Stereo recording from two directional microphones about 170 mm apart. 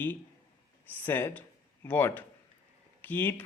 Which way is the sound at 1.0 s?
10° left (ahead or behind).